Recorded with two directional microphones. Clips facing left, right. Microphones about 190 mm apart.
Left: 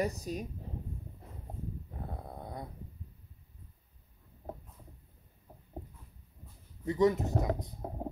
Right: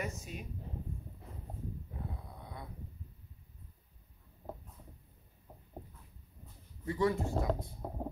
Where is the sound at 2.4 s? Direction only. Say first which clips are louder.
Left 7 dB; 45° left (ahead or behind).